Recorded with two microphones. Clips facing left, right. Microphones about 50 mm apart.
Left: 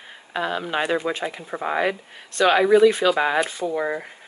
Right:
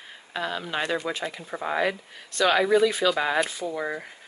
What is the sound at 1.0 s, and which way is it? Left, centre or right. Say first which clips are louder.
Speech: left 4 dB; left.